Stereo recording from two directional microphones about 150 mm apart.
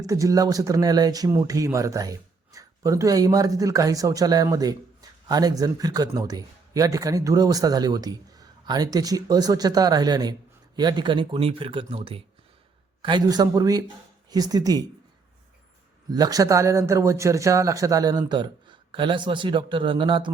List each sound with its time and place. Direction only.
0.0 s speech: 20° right (ahead or behind)
16.1 s speech: 25° right (ahead or behind)